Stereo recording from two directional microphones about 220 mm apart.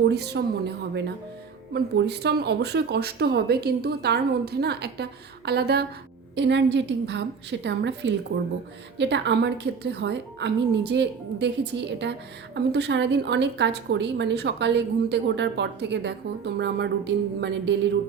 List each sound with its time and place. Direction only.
0.0 s a woman's voice: 50° right (ahead or behind)